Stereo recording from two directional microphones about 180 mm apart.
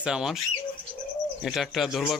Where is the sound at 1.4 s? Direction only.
Centre (ahead or behind).